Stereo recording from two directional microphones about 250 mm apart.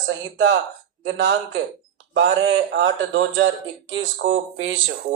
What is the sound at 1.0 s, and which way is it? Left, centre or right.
Speech, right.